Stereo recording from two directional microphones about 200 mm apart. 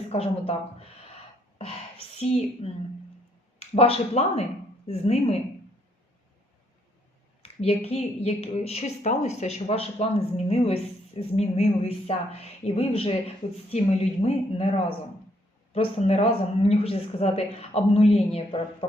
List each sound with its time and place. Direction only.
0.1 s speech: 30° left (ahead or behind)
2.6 s a woman's voice: 30° left (ahead or behind)
7.4 s a woman's voice: 30° left (ahead or behind)
15.7 s a woman's voice: 30° left (ahead or behind)